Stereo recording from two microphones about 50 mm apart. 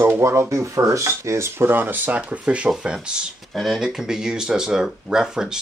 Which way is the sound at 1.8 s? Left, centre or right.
Right.